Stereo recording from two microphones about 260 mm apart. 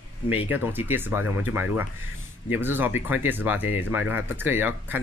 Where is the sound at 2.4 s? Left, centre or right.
Centre.